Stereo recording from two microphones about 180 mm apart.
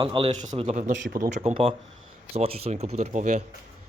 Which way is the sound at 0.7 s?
45° right (ahead or behind).